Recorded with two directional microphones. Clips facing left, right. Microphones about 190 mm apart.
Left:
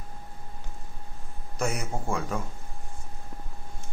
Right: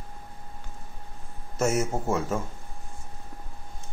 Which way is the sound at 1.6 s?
40° right (ahead or behind).